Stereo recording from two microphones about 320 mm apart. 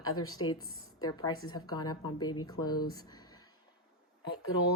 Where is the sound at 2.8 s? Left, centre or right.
Centre.